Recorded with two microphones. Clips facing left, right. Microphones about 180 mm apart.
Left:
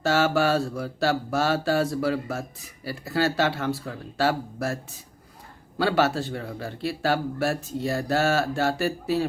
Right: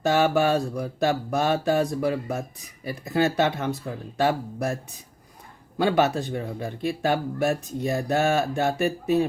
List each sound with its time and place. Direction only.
0.0 s mantra: 15° right (ahead or behind)